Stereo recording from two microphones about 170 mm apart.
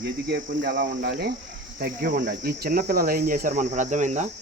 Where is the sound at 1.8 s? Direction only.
60° right (ahead or behind).